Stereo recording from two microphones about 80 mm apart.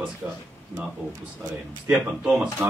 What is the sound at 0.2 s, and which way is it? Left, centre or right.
Speech, centre.